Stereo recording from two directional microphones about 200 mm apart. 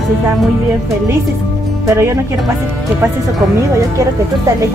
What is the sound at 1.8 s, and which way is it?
Speech, 15° right (ahead or behind).